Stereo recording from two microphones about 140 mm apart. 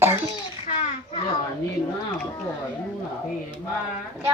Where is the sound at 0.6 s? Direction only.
45° left (ahead or behind).